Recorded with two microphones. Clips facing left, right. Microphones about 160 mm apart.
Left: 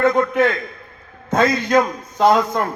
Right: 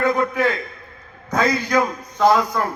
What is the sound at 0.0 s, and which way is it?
Speech, 25° left (ahead or behind).